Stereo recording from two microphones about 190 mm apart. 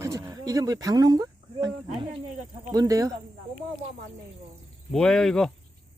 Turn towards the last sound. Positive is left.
turn(degrees=0)  # may be behind; listen again after turning